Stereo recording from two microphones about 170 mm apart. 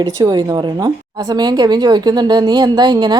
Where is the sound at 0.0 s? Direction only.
25° right (ahead or behind).